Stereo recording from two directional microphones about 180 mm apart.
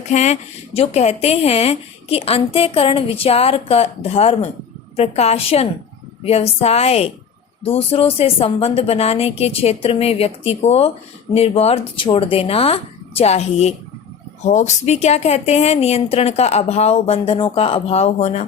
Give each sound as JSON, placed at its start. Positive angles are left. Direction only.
{"t": 0.1, "sound": "a woman's voice", "side_deg": 40}